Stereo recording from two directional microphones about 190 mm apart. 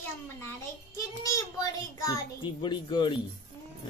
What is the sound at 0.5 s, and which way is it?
A child's voice, 20° left (ahead or behind).